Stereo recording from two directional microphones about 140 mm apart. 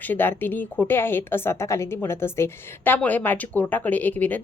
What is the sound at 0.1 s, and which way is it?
A woman's voice, 15° left (ahead or behind).